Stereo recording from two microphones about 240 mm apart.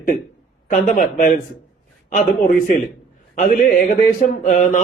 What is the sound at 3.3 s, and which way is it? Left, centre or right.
A man's voice, left.